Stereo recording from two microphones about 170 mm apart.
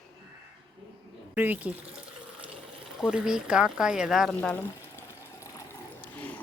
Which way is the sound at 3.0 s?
5° right (ahead or behind).